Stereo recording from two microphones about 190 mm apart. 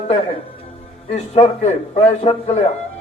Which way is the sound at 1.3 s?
35° left (ahead or behind).